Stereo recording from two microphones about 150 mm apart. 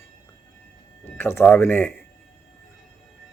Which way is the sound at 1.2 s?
15° left (ahead or behind).